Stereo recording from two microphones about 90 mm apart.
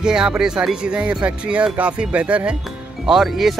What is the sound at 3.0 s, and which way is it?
Speech, 5° right (ahead or behind).